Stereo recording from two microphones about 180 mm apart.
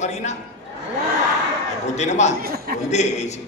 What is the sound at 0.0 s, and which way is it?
Speech, 40° left (ahead or behind).